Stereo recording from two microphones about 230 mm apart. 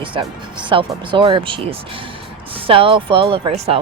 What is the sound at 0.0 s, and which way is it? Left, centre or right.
Speech, right.